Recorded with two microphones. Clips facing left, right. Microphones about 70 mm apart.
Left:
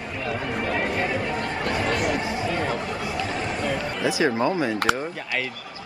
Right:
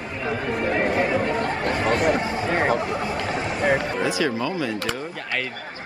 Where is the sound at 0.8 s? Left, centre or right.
Right.